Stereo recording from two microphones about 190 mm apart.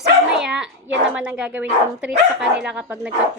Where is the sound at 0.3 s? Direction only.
5° right (ahead or behind).